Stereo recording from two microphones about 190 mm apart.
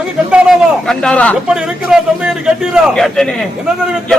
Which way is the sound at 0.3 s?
5° right (ahead or behind).